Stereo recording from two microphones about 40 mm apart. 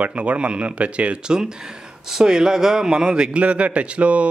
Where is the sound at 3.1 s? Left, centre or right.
Right.